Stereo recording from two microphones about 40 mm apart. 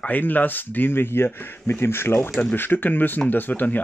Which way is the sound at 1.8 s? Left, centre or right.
Left.